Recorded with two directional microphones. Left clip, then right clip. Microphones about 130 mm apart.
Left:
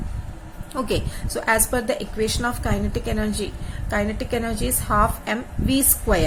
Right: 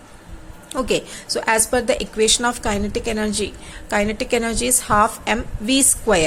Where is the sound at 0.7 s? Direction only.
15° right (ahead or behind).